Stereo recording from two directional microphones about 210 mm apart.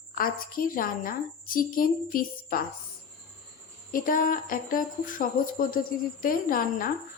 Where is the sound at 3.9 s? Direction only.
40° left (ahead or behind).